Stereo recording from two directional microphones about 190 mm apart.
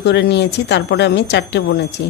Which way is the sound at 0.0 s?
65° left (ahead or behind).